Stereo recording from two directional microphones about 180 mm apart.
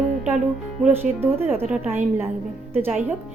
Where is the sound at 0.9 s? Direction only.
10° right (ahead or behind).